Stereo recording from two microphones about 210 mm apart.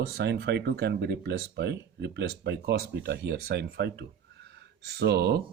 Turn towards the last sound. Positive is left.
turn(degrees=-50)  # may be behind; listen again after turning